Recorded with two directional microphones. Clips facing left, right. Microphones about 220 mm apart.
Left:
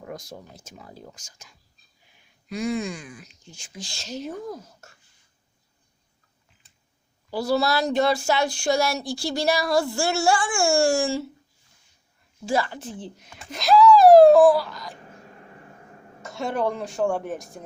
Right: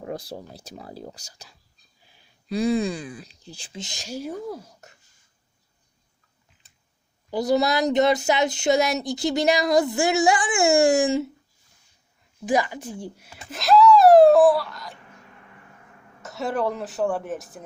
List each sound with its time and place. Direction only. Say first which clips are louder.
0.0 s speech: right 5 dB; 30° right (ahead or behind); by 4.9 s 15° right (ahead or behind)
7.3 s speech: right 2 dB; 20° right (ahead or behind)
12.5 s speech: right 2 dB; 15° right (ahead or behind)
14.9 s hiccup: left 4 dB; 35° left (ahead or behind)
16.2 s a woman's voice: even; centre (ahead or behind)